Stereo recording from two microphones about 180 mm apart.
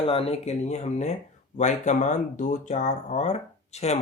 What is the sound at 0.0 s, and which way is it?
Speech, 30° left (ahead or behind).